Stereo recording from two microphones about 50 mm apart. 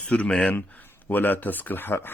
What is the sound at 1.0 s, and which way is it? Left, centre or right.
Speech, left.